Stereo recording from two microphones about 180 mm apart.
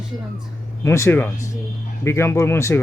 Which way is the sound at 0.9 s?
15° left (ahead or behind).